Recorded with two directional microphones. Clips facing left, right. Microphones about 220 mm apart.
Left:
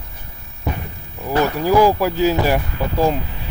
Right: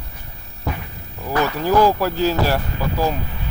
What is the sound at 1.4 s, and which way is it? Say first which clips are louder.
Speech: left 2 dB; 10° left (ahead or behind).